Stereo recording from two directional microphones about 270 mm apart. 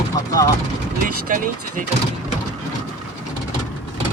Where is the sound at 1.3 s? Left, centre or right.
Right.